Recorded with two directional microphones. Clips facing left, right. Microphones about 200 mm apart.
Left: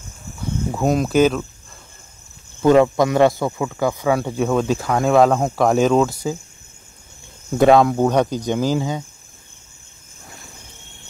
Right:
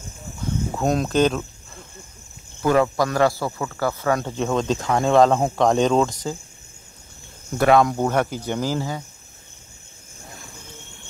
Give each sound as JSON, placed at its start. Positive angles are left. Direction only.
{"t": 0.7, "sound": "speech", "side_deg": 5}
{"t": 2.6, "sound": "speech", "side_deg": 20}
{"t": 7.5, "sound": "speech", "side_deg": 20}
{"t": 7.8, "sound": "speech", "side_deg": 10}